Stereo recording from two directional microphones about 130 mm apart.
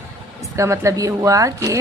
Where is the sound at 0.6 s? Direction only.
25° right (ahead or behind).